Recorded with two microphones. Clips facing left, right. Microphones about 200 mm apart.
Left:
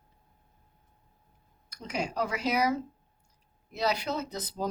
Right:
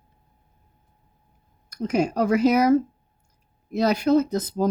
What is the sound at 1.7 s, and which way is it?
Speech, 45° right (ahead or behind).